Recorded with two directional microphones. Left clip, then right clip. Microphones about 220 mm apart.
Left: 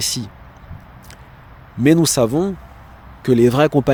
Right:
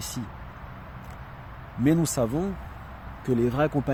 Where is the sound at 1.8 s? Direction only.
50° left (ahead or behind).